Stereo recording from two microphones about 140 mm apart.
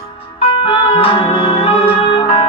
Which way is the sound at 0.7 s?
35° left (ahead or behind).